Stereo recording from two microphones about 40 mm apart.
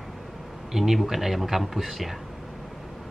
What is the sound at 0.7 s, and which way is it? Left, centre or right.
A man's voice, centre.